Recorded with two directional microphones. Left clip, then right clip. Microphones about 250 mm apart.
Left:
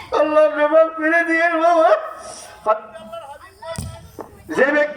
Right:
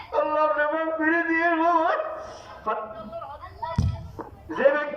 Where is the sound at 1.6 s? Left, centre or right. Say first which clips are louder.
Left 8 dB; left.